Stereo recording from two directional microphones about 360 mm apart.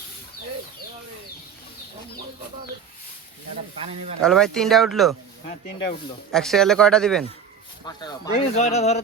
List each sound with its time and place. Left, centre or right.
4.2 s speech: centre
6.3 s speech: centre